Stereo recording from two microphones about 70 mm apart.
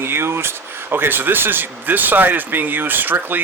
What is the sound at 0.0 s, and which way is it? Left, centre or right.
Speech, right.